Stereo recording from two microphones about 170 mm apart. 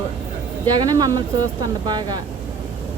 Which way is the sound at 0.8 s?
20° right (ahead or behind).